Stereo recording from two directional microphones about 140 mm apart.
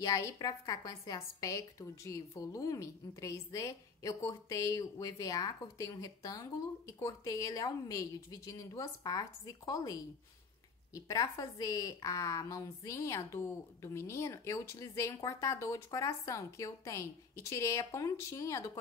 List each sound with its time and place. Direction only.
0.0 s a woman's voice: 25° left (ahead or behind)